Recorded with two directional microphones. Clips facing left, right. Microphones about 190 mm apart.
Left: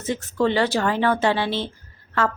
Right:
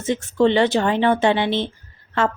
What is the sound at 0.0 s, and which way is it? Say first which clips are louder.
Speech: right 4 dB; 25° right (ahead or behind).